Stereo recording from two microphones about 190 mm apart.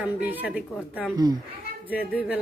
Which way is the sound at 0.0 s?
10° right (ahead or behind).